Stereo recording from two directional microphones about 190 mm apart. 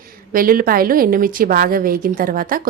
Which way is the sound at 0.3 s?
50° right (ahead or behind).